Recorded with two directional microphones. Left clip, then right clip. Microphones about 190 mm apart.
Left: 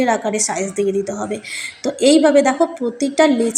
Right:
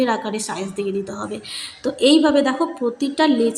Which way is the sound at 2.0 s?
10° left (ahead or behind).